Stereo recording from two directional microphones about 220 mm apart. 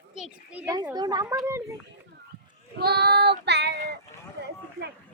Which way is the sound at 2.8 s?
45° right (ahead or behind).